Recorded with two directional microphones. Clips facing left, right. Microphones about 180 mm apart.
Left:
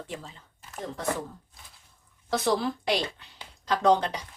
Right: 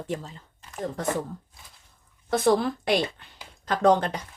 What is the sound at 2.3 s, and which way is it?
Speech, 50° right (ahead or behind).